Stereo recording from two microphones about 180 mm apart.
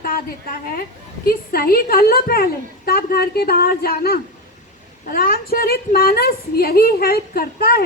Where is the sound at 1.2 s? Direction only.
55° left (ahead or behind).